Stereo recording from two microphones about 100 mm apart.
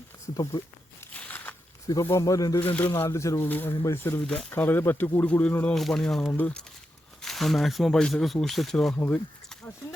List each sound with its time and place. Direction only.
0.6 s speech: 50° left (ahead or behind)
1.1 s crackle: 15° left (ahead or behind)
1.9 s speech: 35° left (ahead or behind)
2.6 s speech: 20° left (ahead or behind)
2.9 s speech: 30° left (ahead or behind)
4.3 s speech: 10° left (ahead or behind)
5.7 s speech: 5° left (ahead or behind)
6.3 s speech: 15° left (ahead or behind)
7.2 s speech: 5° left (ahead or behind)
9.0 s speech: 15° left (ahead or behind)